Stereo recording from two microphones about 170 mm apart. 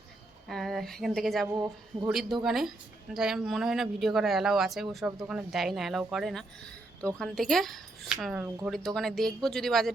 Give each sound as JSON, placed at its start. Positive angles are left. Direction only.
{"t": 0.4, "sound": "speech", "side_deg": 0}